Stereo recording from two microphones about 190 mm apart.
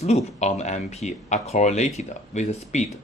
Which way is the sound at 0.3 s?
35° left (ahead or behind).